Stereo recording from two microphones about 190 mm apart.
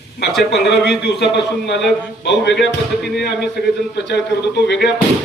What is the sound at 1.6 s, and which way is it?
A man's voice, 65° left (ahead or behind).